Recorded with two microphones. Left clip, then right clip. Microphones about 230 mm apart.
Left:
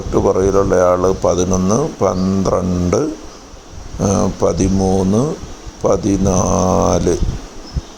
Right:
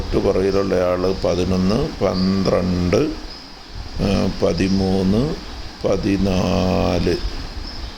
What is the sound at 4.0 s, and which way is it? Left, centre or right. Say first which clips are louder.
Speech: left 4 dB; centre.